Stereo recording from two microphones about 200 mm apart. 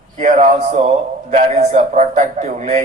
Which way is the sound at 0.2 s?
35° right (ahead or behind).